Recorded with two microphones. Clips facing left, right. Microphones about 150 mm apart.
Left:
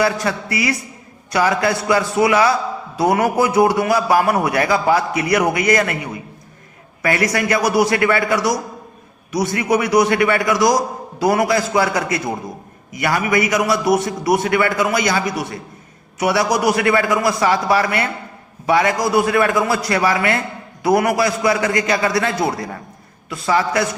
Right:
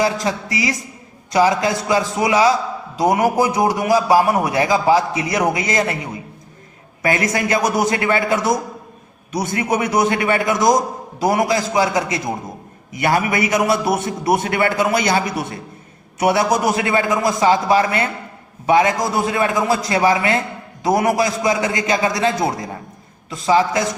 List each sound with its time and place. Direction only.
0.0 s a man's voice: 20° right (ahead or behind)
7.0 s a man's voice: 25° right (ahead or behind)